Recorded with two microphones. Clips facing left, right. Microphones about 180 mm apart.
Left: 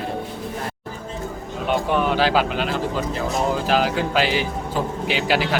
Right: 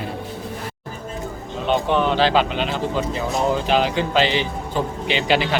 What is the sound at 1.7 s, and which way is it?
Speech, 5° left (ahead or behind).